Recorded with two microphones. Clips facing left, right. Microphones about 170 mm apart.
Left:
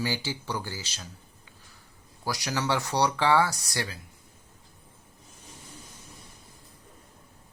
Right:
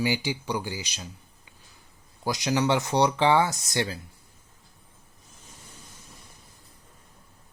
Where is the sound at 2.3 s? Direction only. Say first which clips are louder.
Right 5 dB; 20° right (ahead or behind).